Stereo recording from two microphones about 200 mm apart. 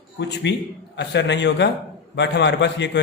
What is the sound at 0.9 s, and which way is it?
Speech, 60° left (ahead or behind).